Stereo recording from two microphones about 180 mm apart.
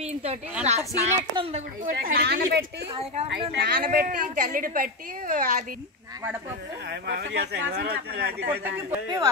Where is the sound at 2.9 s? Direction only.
30° right (ahead or behind).